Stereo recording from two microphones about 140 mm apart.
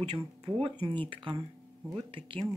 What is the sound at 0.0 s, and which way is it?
Speech, 35° right (ahead or behind).